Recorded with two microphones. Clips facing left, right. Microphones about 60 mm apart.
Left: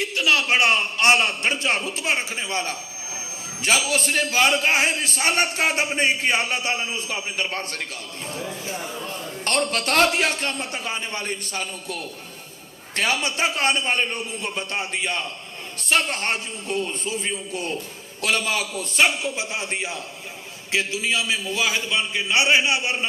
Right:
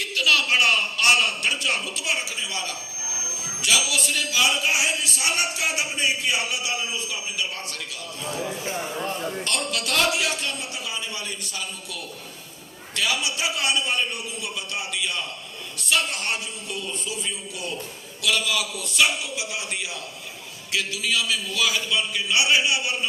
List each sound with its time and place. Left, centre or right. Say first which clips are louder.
0.0 s a man's voice: left 1 dB; left
9.4 s a man's voice: left 4 dB; left